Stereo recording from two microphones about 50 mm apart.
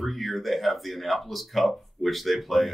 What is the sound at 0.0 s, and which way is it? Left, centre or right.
Speech, centre.